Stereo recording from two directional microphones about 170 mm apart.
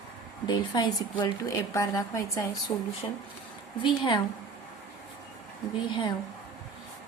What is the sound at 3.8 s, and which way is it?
Speech, 30° left (ahead or behind).